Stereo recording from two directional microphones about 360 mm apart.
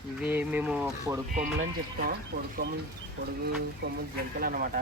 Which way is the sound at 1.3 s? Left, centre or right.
Right.